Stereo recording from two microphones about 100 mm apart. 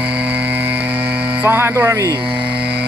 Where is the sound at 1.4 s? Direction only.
25° right (ahead or behind).